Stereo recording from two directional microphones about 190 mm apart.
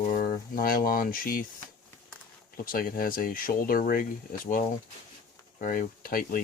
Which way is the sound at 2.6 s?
50° left (ahead or behind).